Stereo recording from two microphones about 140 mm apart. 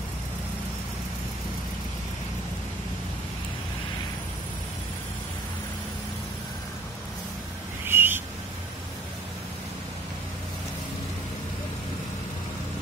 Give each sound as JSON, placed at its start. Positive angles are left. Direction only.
{"t": 7.8, "sound": "owl", "side_deg": -15}